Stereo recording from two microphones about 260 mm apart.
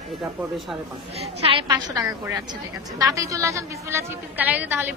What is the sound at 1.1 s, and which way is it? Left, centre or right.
A woman's voice, right.